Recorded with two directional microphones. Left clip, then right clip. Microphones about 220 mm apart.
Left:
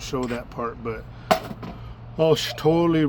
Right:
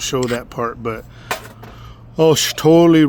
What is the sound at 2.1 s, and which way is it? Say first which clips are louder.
Rub: right 7 dB; 50° right (ahead or behind).